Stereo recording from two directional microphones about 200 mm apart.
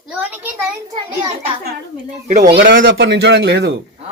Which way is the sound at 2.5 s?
50° right (ahead or behind).